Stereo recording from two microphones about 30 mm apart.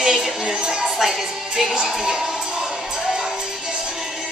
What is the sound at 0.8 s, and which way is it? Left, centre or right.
Music, centre.